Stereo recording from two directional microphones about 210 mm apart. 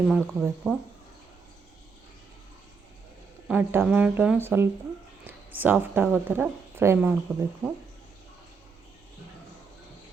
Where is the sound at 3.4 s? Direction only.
10° right (ahead or behind).